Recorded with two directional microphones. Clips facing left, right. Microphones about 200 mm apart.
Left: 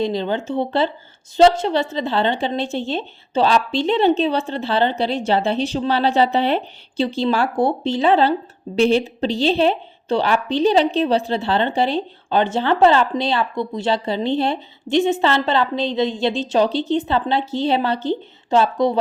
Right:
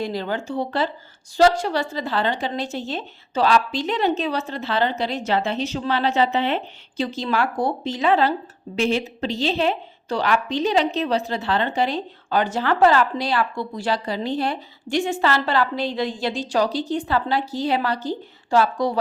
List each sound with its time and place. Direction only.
0.0 s speech: 25° left (ahead or behind)